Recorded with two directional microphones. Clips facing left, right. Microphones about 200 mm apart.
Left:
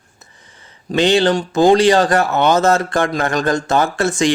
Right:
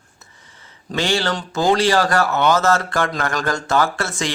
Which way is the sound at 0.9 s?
20° left (ahead or behind).